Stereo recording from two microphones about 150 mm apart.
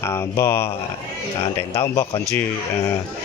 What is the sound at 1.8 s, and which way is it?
Speech, 20° left (ahead or behind).